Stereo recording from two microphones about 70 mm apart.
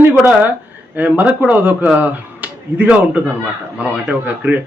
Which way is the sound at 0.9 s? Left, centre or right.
Right.